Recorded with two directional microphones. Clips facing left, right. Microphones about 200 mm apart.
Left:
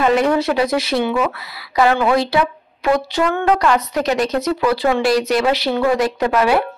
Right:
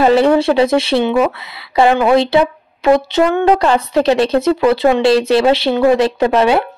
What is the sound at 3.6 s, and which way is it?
Speech, 30° right (ahead or behind).